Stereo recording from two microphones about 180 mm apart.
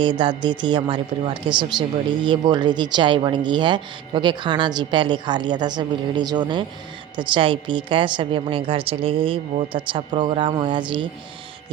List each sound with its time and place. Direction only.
0.0 s speech: 25° right (ahead or behind)